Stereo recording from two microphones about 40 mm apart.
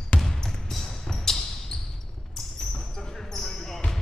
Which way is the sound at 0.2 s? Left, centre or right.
Centre.